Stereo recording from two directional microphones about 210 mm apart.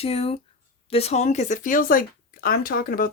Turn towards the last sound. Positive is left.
turn(degrees=40)  # may be behind; listen again after turning